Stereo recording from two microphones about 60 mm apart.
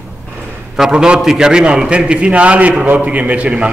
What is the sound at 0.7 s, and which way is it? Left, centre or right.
A man's voice, centre.